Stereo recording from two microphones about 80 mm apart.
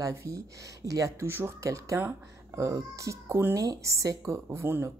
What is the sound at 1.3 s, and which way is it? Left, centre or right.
Speech, right.